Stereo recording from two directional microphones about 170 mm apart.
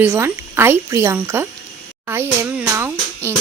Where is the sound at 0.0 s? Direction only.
10° right (ahead or behind).